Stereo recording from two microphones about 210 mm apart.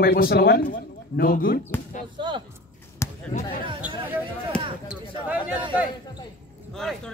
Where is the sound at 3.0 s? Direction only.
15° left (ahead or behind).